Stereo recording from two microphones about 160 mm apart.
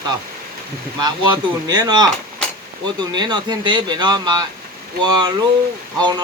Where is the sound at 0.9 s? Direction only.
25° right (ahead or behind).